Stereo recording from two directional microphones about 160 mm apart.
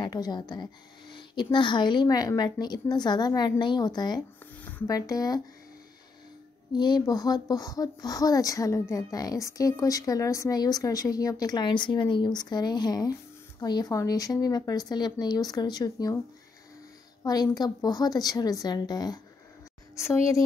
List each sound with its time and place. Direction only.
0.0 s speech: 25° left (ahead or behind)
6.7 s speech: 25° left (ahead or behind)
17.2 s a woman's voice: 25° left (ahead or behind)